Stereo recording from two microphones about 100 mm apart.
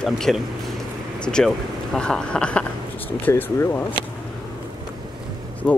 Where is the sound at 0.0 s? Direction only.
5° left (ahead or behind); by 3.8 s 20° left (ahead or behind).